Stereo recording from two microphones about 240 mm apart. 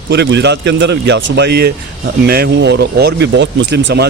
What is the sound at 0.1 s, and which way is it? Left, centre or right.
Speech, right.